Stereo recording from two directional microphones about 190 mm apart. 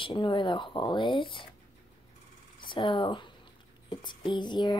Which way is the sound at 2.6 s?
25° left (ahead or behind).